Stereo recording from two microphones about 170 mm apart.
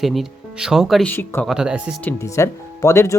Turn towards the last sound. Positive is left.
turn(degrees=15)  # may be behind; listen again after turning